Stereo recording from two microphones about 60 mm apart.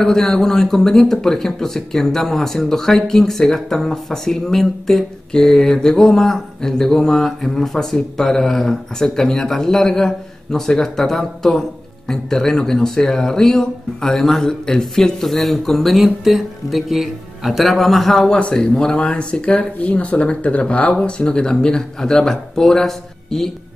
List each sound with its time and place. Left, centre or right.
0.0 s speech: centre
18.3 s speech: centre